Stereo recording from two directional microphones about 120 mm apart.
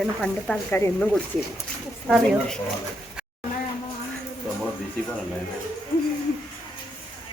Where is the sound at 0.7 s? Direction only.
20° left (ahead or behind).